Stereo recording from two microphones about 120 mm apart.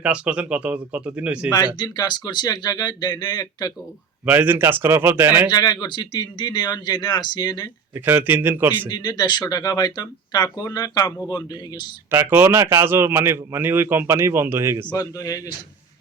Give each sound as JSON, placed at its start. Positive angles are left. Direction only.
{"t": 0.0, "sound": "speech", "side_deg": -10}
{"t": 1.5, "sound": "speech", "side_deg": 35}
{"t": 4.3, "sound": "speech", "side_deg": -15}
{"t": 5.5, "sound": "speech", "side_deg": 35}
{"t": 7.9, "sound": "speech", "side_deg": -15}
{"t": 8.9, "sound": "speech", "side_deg": 35}
{"t": 12.1, "sound": "speech", "side_deg": -15}
{"t": 14.9, "sound": "speech", "side_deg": 30}